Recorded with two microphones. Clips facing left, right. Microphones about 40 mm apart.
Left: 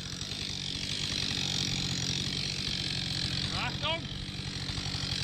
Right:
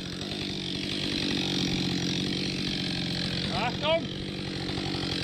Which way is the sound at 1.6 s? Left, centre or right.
Centre.